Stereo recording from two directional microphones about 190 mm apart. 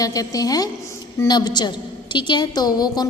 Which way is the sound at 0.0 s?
20° left (ahead or behind).